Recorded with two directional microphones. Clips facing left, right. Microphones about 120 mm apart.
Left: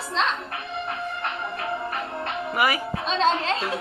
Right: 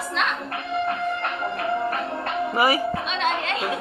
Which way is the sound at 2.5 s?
30° right (ahead or behind).